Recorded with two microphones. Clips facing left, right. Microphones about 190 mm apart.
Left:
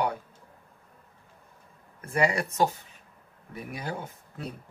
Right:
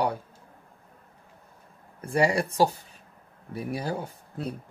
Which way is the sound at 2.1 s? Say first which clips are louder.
Right 3 dB; 35° right (ahead or behind).